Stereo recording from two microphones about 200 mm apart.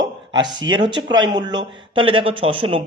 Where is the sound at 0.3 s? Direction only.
25° right (ahead or behind).